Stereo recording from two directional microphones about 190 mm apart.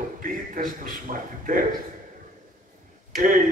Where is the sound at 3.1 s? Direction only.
45° right (ahead or behind).